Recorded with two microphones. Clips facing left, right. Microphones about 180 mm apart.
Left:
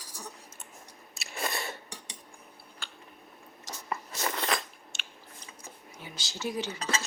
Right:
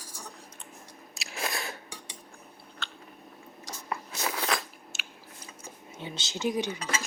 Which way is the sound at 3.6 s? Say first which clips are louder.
Even; centre (ahead or behind).